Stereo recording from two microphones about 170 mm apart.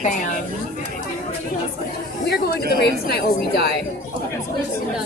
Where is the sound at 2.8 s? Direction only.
70° left (ahead or behind).